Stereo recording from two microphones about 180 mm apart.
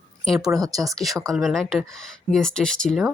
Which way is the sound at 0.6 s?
20° right (ahead or behind).